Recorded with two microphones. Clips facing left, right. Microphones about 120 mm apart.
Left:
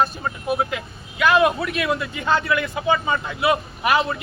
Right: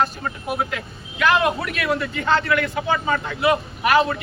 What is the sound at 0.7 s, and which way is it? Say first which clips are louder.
Speech: left 1 dB; 15° left (ahead or behind).